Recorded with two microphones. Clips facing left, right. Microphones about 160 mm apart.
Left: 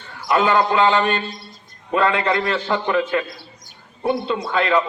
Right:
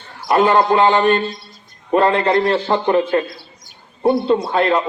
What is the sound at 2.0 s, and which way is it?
A man's voice, 35° right (ahead or behind).